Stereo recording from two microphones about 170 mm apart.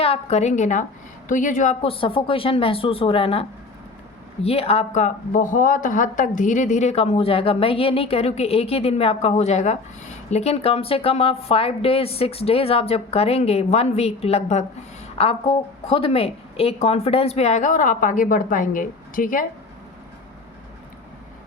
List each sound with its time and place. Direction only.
0.0 s speech: 35° left (ahead or behind)
1.8 s speech: 30° left (ahead or behind)
4.4 s speech: 35° left (ahead or behind); by 19.5 s 55° left (ahead or behind)